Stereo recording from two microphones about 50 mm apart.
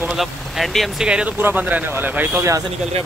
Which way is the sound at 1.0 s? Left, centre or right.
Right.